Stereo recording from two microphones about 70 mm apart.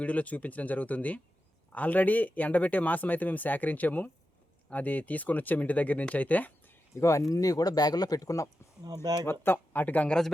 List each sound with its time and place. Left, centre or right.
0.0 s speech: left
6.9 s speech: left
9.2 s speech: left